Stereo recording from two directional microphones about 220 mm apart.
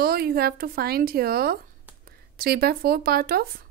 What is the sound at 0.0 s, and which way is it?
A woman's voice, 45° right (ahead or behind).